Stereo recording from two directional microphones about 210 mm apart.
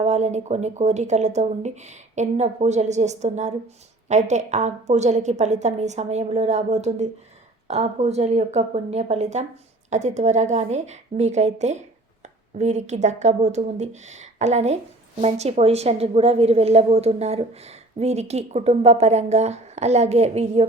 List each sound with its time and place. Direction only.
0.0 s a woman's voice: 30° right (ahead or behind)